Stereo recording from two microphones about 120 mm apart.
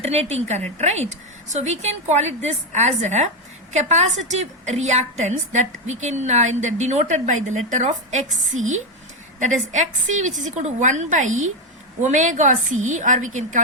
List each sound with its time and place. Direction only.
0.0 s a woman's voice: 60° right (ahead or behind); by 13.6 s 90° right